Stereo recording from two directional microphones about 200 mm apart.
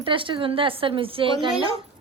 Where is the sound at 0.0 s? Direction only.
25° right (ahead or behind).